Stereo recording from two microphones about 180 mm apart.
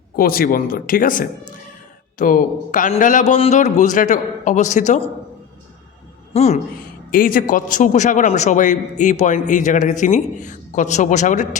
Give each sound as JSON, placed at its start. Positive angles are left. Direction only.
{"t": 0.2, "sound": "a man's voice", "side_deg": 55}
{"t": 6.3, "sound": "a man's voice", "side_deg": 35}
{"t": 7.1, "sound": "a man's voice", "side_deg": 50}